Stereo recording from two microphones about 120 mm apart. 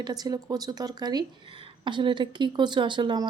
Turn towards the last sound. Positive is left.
turn(degrees=-40)  # may be behind; listen again after turning